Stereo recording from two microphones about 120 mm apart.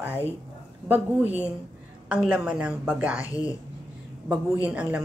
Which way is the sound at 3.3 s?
30° left (ahead or behind).